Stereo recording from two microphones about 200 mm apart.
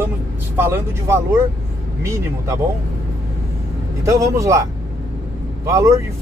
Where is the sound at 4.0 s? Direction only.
15° right (ahead or behind).